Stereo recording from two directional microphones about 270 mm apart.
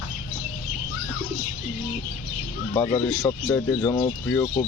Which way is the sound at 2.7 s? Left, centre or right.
Centre.